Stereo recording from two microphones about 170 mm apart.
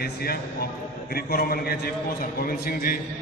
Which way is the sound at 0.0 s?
65° left (ahead or behind).